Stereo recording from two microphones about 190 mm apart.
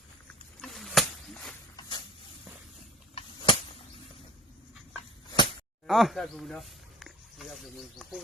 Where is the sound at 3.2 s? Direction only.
30° left (ahead or behind).